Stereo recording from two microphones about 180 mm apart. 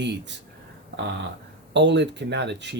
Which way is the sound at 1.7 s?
75° right (ahead or behind).